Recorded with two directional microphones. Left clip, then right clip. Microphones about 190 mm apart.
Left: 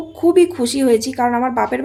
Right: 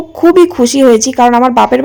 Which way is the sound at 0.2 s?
35° right (ahead or behind).